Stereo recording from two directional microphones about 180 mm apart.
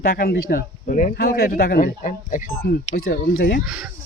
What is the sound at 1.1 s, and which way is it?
Speech, 60° left (ahead or behind).